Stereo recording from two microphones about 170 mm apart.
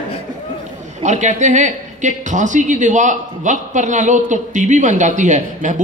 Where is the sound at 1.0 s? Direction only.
45° right (ahead or behind).